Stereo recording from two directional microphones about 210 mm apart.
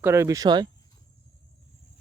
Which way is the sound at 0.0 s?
10° right (ahead or behind).